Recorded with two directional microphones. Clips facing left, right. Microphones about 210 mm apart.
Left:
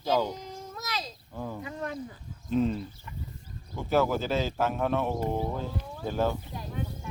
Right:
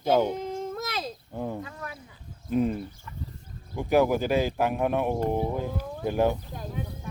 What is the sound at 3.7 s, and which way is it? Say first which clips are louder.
Speech: right 3 dB; 15° right (ahead or behind).